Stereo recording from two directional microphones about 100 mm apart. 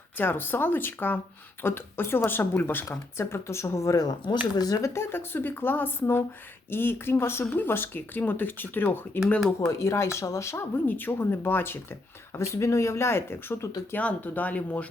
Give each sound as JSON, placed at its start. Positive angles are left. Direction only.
{"t": 0.2, "sound": "speech", "side_deg": 20}
{"t": 9.6, "sound": "speech", "side_deg": 30}
{"t": 10.8, "sound": "speech", "side_deg": 20}